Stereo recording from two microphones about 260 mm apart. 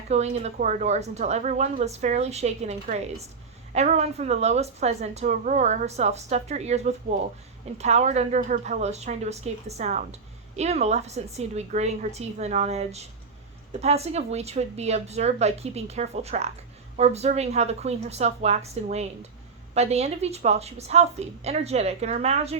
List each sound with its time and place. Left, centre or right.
0.1 s speech: right